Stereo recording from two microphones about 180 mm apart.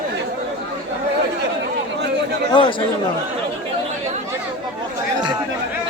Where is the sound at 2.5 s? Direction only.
30° left (ahead or behind).